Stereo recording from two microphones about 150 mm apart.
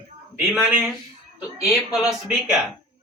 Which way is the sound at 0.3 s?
5° right (ahead or behind).